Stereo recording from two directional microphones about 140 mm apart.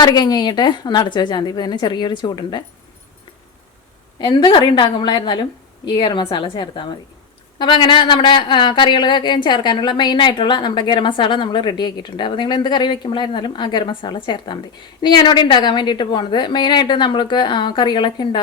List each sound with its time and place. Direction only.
0.0 s speech: 30° left (ahead or behind)
4.2 s speech: 35° left (ahead or behind)